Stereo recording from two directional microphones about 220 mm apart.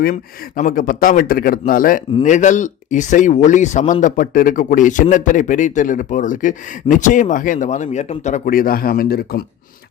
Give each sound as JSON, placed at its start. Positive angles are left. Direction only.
{"t": 0.0, "sound": "speech", "side_deg": 40}